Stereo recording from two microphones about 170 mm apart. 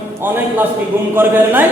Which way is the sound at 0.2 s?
10° right (ahead or behind).